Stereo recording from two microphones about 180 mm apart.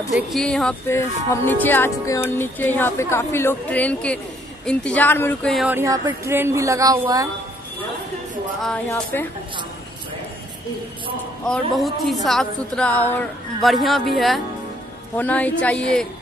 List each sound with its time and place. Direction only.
0.1 s a woman's voice: centre (ahead or behind)
0.9 s music: 15° left (ahead or behind)
5.5 s a woman's voice: centre (ahead or behind)
5.8 s a woman's voice: 15° right (ahead or behind)
8.9 s music: 10° left (ahead or behind)
11.4 s a woman's voice: centre (ahead or behind)
15.1 s music: 10° left (ahead or behind)